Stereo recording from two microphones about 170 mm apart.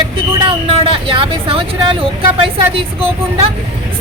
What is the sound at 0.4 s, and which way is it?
Speech, 30° right (ahead or behind).